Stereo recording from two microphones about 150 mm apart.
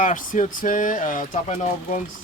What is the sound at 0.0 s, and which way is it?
Speech, 60° left (ahead or behind).